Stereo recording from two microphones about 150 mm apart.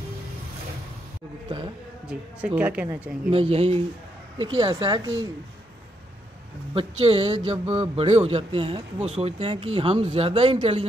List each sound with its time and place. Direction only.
2.0 s speech: 10° right (ahead or behind)
3.3 s speech: 40° right (ahead or behind)
6.7 s speech: 40° right (ahead or behind)